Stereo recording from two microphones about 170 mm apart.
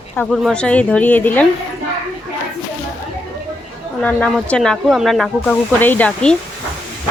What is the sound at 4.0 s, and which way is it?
Speech, 5° left (ahead or behind).